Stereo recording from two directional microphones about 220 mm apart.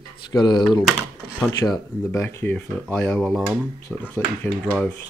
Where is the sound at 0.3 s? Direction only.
20° left (ahead or behind).